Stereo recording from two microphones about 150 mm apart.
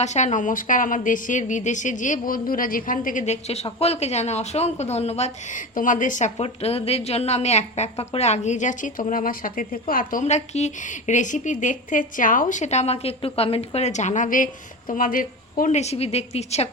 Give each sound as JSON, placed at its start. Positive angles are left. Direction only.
{"t": 0.0, "sound": "a woman's voice", "side_deg": 50}
{"t": 6.3, "sound": "a woman's voice", "side_deg": 40}